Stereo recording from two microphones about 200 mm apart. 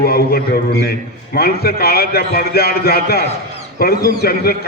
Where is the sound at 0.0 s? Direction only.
50° left (ahead or behind).